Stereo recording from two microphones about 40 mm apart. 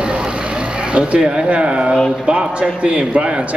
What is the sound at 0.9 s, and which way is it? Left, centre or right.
A man's voice, right.